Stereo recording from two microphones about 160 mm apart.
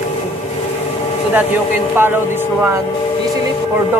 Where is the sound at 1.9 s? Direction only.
15° right (ahead or behind).